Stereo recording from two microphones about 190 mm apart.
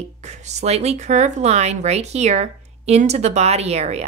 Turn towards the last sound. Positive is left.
turn(degrees=-35)  # may be behind; listen again after turning